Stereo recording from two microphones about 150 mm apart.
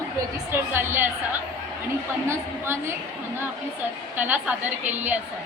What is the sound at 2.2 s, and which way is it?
Speech, 15° right (ahead or behind).